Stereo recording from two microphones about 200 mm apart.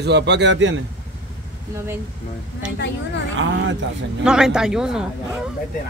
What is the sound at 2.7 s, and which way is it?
Speech, 60° left (ahead or behind).